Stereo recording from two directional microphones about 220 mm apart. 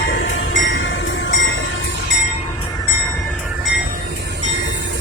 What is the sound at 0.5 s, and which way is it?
Train, 60° left (ahead or behind).